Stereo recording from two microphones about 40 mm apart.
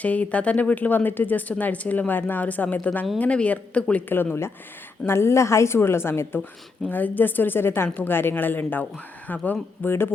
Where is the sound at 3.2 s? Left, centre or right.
Left.